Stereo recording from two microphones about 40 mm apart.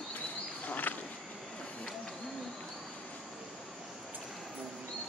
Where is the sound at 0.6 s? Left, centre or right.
Left.